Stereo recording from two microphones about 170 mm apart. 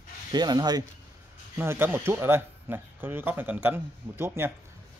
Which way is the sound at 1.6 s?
15° right (ahead or behind).